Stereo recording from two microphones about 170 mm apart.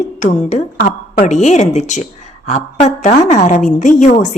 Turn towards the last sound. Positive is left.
turn(degrees=45)  # may be behind; listen again after turning